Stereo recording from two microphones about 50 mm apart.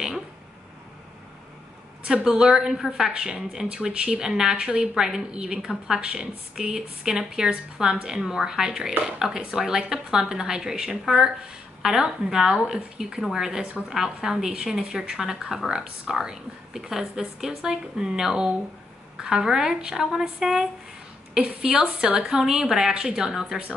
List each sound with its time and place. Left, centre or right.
2.2 s speech: centre